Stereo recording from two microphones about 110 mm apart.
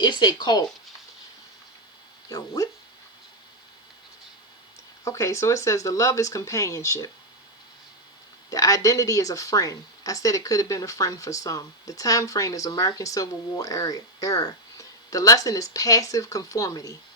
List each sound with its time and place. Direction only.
0.0 s speech: 40° left (ahead or behind)
2.3 s speech: 30° left (ahead or behind)
5.0 s speech: 30° left (ahead or behind)
8.4 s speech: 30° left (ahead or behind)